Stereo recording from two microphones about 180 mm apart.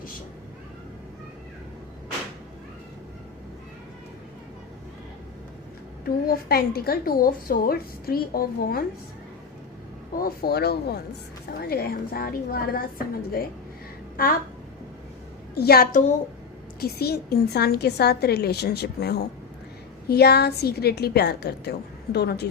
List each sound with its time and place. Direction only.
6.1 s a woman's voice: 55° left (ahead or behind)
10.2 s a woman's voice: 55° left (ahead or behind)
15.5 s a woman's voice: 60° left (ahead or behind)
16.8 s a woman's voice: 60° left (ahead or behind)